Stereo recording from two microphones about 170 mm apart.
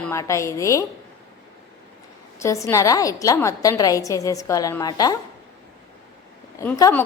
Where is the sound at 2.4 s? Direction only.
15° left (ahead or behind).